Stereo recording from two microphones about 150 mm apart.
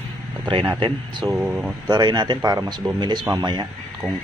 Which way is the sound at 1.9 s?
30° right (ahead or behind).